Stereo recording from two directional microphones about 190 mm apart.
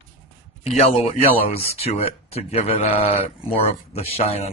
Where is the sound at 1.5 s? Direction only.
30° left (ahead or behind).